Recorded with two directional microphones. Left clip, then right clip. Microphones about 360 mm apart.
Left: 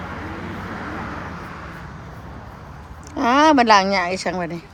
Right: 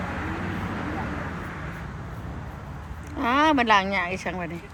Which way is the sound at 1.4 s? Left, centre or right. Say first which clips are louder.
Left 2 dB; left.